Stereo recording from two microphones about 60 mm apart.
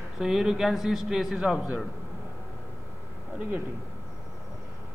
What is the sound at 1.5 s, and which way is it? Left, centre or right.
Speech, right.